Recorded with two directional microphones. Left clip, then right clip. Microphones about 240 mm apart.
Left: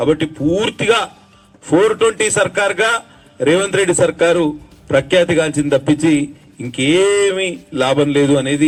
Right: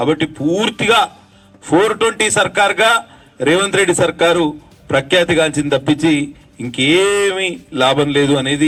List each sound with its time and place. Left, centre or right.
0.0 s a man's voice: right